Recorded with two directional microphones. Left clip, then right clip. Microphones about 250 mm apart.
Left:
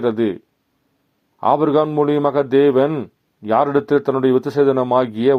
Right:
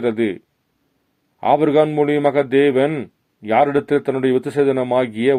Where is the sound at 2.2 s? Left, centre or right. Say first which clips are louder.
Right 1 dB; centre.